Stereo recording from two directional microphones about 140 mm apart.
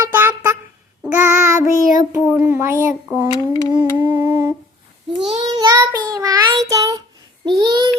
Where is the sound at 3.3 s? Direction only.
25° left (ahead or behind).